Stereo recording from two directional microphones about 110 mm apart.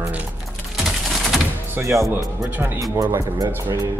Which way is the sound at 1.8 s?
25° right (ahead or behind).